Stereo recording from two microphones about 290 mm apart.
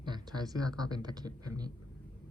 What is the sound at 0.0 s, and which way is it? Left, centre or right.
A man's voice, centre.